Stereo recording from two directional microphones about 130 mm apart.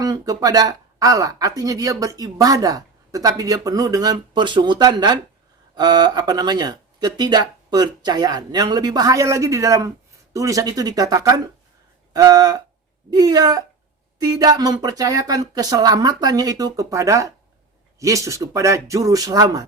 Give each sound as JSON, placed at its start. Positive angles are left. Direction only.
{"t": 0.0, "sound": "speech", "side_deg": -30}